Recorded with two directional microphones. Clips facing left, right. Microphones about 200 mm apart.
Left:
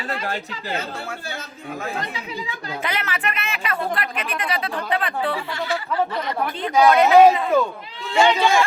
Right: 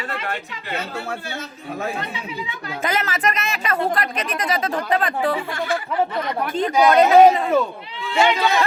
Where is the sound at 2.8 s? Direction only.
45° right (ahead or behind).